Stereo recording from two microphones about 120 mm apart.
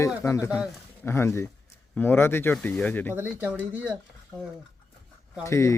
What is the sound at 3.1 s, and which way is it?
Speech, 15° right (ahead or behind).